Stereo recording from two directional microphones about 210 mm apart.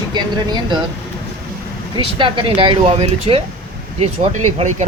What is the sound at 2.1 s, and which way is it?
Speech, 25° right (ahead or behind).